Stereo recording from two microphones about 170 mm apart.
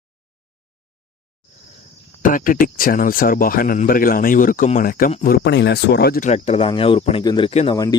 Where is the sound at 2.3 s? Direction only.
50° left (ahead or behind).